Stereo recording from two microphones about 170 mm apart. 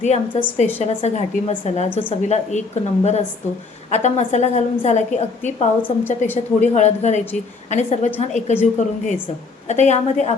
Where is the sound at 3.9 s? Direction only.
40° left (ahead or behind).